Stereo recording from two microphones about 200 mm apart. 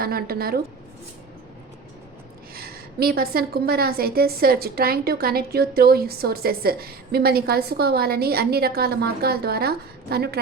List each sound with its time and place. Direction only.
0.0 s a woman's voice: 50° right (ahead or behind)
2.6 s a woman's voice: 50° right (ahead or behind)